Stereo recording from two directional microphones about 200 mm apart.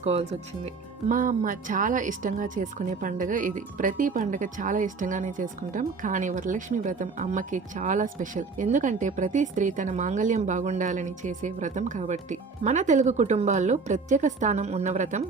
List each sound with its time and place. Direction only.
0.0 s speech: 30° right (ahead or behind)